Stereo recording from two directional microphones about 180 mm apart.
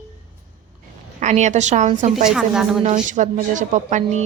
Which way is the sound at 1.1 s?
40° right (ahead or behind).